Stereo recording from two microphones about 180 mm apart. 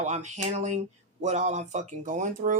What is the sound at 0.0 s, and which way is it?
Speech, 40° right (ahead or behind).